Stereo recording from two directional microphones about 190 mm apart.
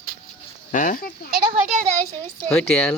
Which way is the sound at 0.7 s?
45° left (ahead or behind).